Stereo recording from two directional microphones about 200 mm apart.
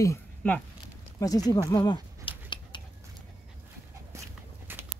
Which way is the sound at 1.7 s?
20° left (ahead or behind).